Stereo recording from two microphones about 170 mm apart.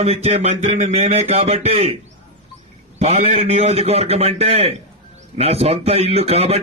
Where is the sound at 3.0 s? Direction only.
40° right (ahead or behind).